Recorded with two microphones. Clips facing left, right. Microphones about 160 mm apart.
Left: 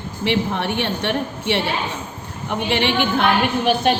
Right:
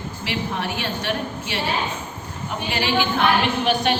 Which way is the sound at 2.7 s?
60° left (ahead or behind).